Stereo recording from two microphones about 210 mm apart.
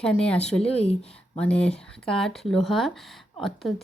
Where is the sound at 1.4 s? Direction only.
5° left (ahead or behind).